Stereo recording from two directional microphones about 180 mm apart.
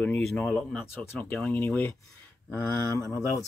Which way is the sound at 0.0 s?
5° left (ahead or behind).